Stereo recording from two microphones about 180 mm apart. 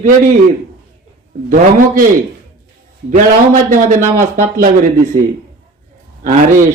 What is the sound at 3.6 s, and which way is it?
A man's voice, 50° right (ahead or behind).